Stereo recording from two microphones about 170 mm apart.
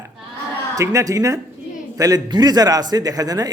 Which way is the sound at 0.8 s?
20° right (ahead or behind).